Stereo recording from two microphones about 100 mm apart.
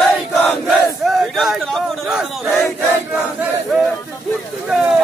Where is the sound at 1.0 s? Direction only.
Centre (ahead or behind).